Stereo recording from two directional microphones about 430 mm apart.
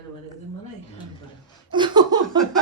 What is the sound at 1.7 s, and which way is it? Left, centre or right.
Laughter, centre.